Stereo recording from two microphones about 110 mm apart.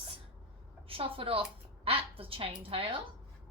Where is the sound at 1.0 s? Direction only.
60° right (ahead or behind).